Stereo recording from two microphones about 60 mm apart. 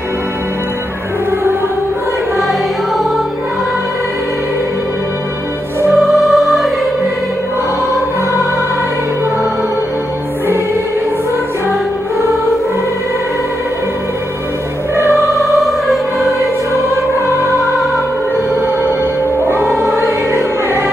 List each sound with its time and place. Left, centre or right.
5.9 s music: centre
15.0 s music: centre
19.6 s music: centre
20.1 s music: right